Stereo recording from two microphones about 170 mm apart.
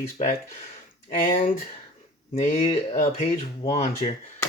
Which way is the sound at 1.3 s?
35° left (ahead or behind).